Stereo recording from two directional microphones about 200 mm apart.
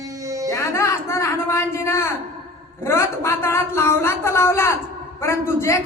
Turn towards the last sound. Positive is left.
turn(degrees=15)  # may be behind; listen again after turning